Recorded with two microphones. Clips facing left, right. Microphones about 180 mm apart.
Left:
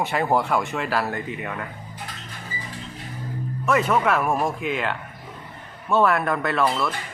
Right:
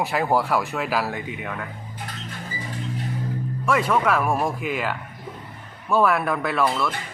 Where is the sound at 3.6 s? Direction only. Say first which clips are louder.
Left 1 dB; 5° left (ahead or behind).